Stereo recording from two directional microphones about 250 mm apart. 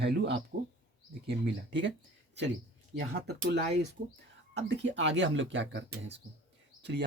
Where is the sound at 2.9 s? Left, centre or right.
Right.